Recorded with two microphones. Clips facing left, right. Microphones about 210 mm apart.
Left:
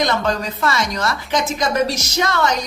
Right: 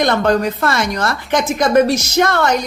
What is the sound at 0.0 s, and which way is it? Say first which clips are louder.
A woman's voice: right 5 dB; 55° right (ahead or behind).